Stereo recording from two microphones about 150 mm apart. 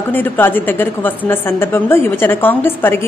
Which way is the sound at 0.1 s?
15° left (ahead or behind).